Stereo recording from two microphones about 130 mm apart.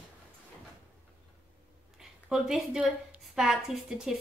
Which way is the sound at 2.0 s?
5° right (ahead or behind).